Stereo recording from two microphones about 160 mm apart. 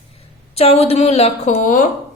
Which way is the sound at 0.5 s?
40° left (ahead or behind).